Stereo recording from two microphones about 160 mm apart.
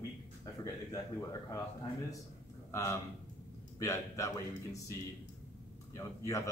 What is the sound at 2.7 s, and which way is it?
A man's voice, 20° left (ahead or behind).